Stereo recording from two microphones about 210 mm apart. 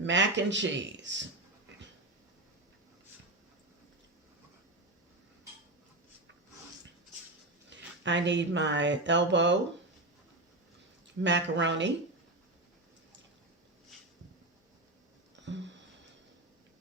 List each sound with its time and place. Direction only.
0.0 s speech: 60° right (ahead or behind)
7.7 s speech: 60° right (ahead or behind)
11.2 s speech: 60° right (ahead or behind)
15.5 s music: 60° right (ahead or behind)